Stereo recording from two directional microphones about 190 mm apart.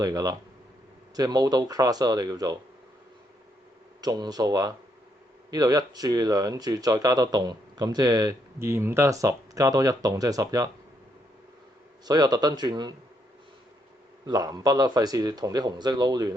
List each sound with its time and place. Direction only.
0.0 s speech: 20° right (ahead or behind)
4.0 s speech: 20° right (ahead or behind)
12.0 s speech: 20° right (ahead or behind)
14.3 s speech: 20° right (ahead or behind)